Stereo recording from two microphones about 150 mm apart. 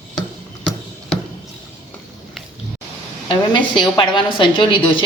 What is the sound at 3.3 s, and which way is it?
A woman's voice, 30° left (ahead or behind).